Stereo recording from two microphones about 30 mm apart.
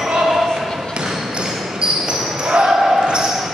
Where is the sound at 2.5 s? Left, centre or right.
Right.